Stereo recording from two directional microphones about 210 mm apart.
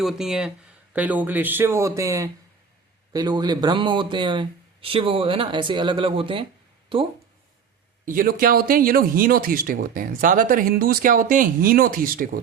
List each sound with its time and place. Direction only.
0.0 s speech: centre (ahead or behind); by 6.4 s 25° right (ahead or behind)
8.0 s speech: 40° right (ahead or behind)